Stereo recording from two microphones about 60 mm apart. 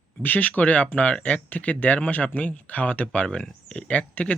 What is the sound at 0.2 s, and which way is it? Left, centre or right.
Speech, left.